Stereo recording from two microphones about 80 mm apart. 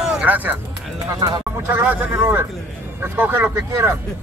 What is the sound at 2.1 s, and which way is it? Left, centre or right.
A man's voice, right.